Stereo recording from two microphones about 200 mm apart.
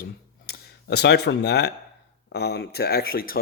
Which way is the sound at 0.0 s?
55° left (ahead or behind).